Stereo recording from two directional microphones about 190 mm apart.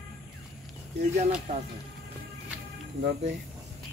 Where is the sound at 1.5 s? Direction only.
35° right (ahead or behind).